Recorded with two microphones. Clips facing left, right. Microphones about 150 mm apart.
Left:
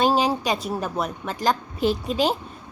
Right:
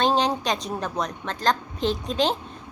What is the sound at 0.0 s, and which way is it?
A woman's voice, 5° left (ahead or behind).